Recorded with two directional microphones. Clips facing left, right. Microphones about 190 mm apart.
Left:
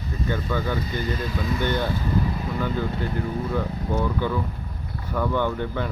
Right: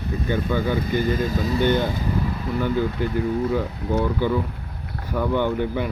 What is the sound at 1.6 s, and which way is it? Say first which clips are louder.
Speech: right 5 dB; 15° right (ahead or behind).